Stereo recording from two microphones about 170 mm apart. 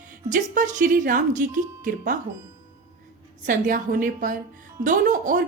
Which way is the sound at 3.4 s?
50° right (ahead or behind).